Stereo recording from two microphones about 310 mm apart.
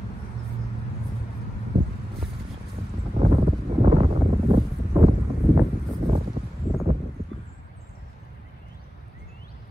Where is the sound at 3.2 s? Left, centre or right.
Right.